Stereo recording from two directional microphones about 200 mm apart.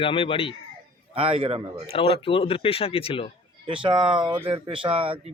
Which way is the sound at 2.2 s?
25° left (ahead or behind).